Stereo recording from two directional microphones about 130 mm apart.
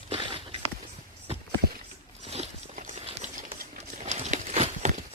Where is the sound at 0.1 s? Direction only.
45° right (ahead or behind).